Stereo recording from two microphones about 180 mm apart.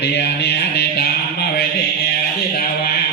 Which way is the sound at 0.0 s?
70° left (ahead or behind).